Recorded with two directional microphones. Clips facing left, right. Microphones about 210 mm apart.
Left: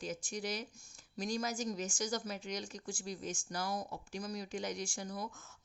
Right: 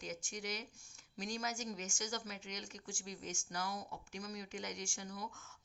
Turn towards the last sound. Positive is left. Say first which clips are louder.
# left 4 dB
turn(degrees=40)  # may be behind; listen again after turning